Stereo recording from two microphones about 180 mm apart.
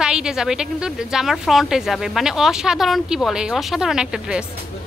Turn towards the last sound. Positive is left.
turn(degrees=-5)  # may be behind; listen again after turning